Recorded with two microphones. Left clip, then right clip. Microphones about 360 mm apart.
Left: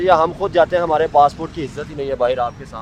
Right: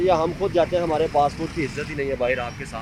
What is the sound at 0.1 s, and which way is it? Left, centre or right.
Speech, left.